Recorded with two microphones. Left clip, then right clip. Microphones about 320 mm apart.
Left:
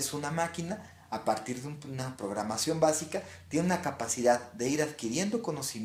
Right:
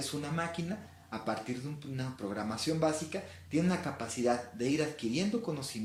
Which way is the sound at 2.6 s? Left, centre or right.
Left.